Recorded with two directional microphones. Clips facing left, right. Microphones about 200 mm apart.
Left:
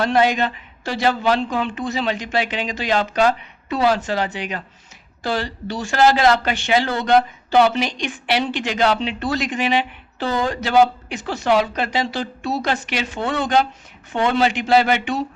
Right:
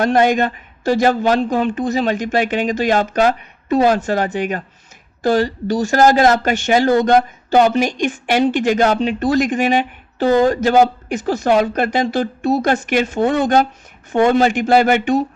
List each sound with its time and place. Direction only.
0.0 s speech: 50° right (ahead or behind)